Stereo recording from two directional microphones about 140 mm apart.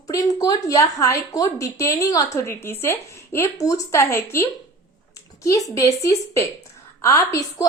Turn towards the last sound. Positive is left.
turn(degrees=25)  # may be behind; listen again after turning